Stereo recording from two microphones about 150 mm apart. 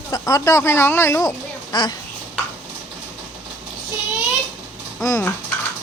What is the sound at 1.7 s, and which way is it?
Speech, 30° left (ahead or behind).